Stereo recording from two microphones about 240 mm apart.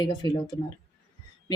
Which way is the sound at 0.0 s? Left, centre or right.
Centre.